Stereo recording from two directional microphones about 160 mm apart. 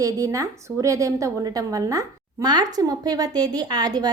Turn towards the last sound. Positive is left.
turn(degrees=-25)  # may be behind; listen again after turning